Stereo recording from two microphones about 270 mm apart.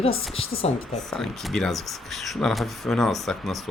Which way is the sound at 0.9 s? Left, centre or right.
Centre.